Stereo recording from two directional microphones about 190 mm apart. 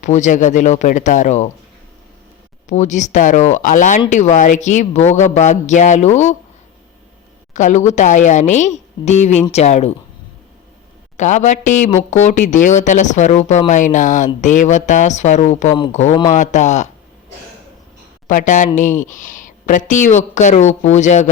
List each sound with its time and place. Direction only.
0.0 s speech: 40° left (ahead or behind)
2.6 s speech: 40° left (ahead or behind)
7.5 s speech: 40° left (ahead or behind)
11.2 s speech: 40° left (ahead or behind)
18.3 s speech: 40° left (ahead or behind)